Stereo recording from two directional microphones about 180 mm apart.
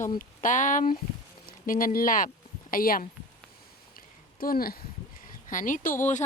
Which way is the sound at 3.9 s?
55° left (ahead or behind).